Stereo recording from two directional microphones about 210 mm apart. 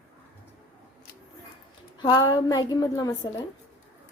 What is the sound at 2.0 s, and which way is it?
A woman's voice, 20° left (ahead or behind).